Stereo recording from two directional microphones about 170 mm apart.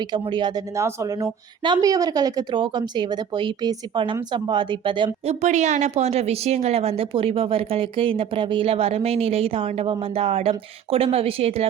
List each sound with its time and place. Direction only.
0.1 s a woman's voice: 25° right (ahead or behind)
5.3 s a woman's voice: 45° right (ahead or behind)